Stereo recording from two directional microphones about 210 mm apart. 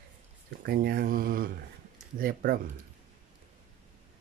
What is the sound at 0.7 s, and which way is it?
Speech, 45° right (ahead or behind).